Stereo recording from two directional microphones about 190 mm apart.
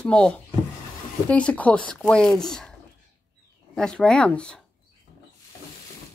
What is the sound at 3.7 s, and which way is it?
Speech, 5° left (ahead or behind).